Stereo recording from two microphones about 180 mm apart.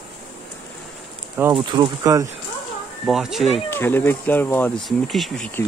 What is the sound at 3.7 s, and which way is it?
Speech, 10° left (ahead or behind).